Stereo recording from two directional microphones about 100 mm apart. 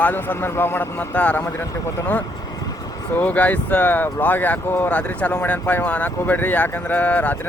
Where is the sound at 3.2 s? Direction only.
15° left (ahead or behind).